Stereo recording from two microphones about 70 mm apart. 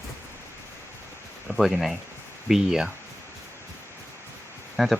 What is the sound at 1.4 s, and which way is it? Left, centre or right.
Speech, centre.